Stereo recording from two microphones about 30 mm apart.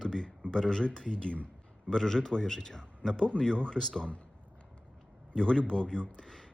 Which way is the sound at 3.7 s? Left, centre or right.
Centre.